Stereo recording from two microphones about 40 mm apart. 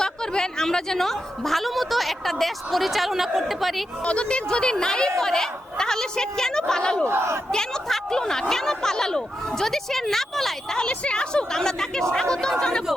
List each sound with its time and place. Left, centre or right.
0.0 s a woman's voice: centre
4.0 s a woman's voice: left; by 10.8 s centre
10.8 s speech: left